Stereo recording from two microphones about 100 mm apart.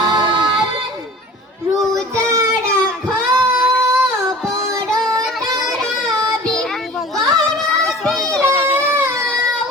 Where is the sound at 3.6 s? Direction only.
25° right (ahead or behind).